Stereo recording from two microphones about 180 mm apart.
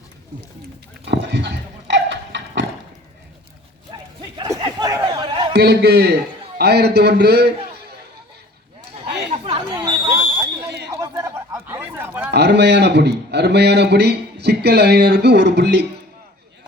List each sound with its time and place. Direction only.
1.0 s horse: 70° right (ahead or behind)
4.4 s chatter: 20° right (ahead or behind)
5.5 s a man's voice: 65° right (ahead or behind)
8.9 s a sound: 30° right (ahead or behind)
9.3 s chatter: 30° right (ahead or behind); by 12.3 s 10° right (ahead or behind)
12.3 s speech: 70° right (ahead or behind)